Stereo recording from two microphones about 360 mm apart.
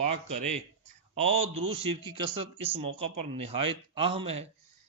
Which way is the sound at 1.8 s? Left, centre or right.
Centre.